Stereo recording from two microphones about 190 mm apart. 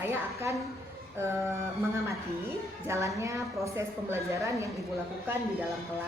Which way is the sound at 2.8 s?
15° right (ahead or behind).